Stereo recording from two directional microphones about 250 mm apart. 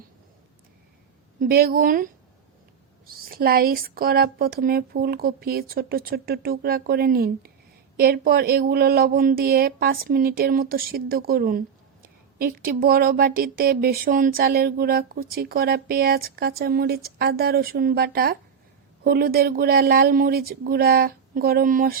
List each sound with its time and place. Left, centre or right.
1.4 s speech: right
3.1 s speech: right